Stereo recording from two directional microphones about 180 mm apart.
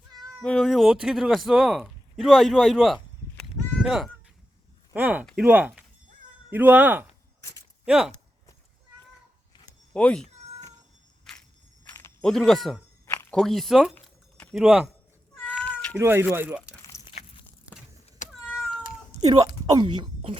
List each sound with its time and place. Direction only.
0.1 s cat: 25° right (ahead or behind)
0.4 s speech: 5° left (ahead or behind)
9.9 s speech: 5° left (ahead or behind)
11.3 s walk: centre (ahead or behind)
11.9 s a sound: 15° left (ahead or behind)
12.2 s speech: centre (ahead or behind)
13.9 s a sound: 10° left (ahead or behind)
14.5 s speech: 5° right (ahead or behind)
15.5 s cat: 5° left (ahead or behind)
16.0 s speech: 10° right (ahead or behind)
17.1 s a sound: 30° left (ahead or behind)
18.2 s cat: 40° left (ahead or behind)
19.2 s speech: 20° right (ahead or behind)